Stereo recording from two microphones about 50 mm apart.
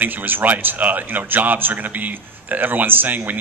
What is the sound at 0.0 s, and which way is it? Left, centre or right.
A man's voice, right.